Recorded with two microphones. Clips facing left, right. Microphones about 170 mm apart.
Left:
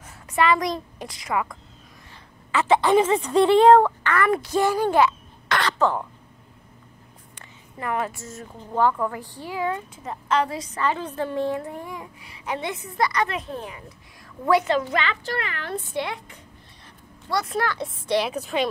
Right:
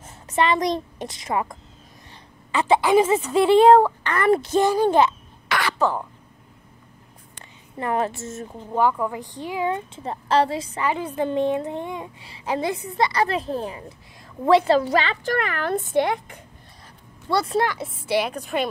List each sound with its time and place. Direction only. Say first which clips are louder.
0.0 s a woman's voice: even; 25° right (ahead or behind)
2.5 s a woman's voice: right 1 dB; 15° right (ahead or behind)
5.5 s speech: even; 10° right (ahead or behind)
7.8 s a woman's voice: right 3 dB; 30° right (ahead or behind)
10.8 s a woman's voice: right 1 dB; 10° right (ahead or behind); by 15.1 s 35° right (ahead or behind)
15.2 s speech: right 6 dB; 50° right (ahead or behind)
17.3 s a woman's voice: right 4 dB; 30° right (ahead or behind)
17.8 s speech: even; 5° right (ahead or behind)